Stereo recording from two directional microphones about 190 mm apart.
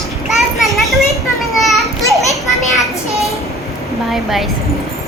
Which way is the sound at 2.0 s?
15° left (ahead or behind).